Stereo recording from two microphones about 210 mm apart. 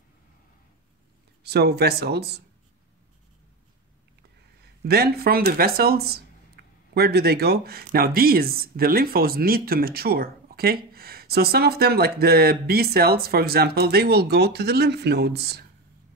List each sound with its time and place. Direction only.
1.4 s speech: 50° right (ahead or behind)
4.8 s speech: 50° right (ahead or behind)